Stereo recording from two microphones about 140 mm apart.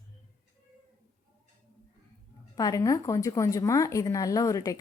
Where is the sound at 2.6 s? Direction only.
25° left (ahead or behind).